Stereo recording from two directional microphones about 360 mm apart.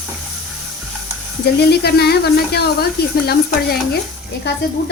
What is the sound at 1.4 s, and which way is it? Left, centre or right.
A woman's voice, left.